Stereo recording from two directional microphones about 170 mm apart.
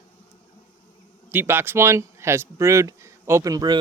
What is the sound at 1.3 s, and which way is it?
Speech, 10° right (ahead or behind).